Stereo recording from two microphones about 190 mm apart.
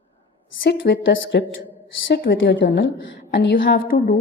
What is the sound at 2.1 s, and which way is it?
Speech, 55° left (ahead or behind).